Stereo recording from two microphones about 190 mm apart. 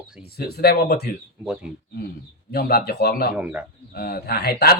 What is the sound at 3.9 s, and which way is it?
Speech, 55° left (ahead or behind).